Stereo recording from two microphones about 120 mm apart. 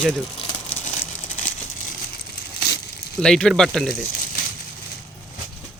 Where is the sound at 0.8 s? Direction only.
90° left.